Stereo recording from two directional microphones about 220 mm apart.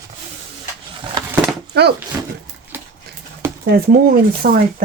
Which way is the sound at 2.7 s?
10° right (ahead or behind).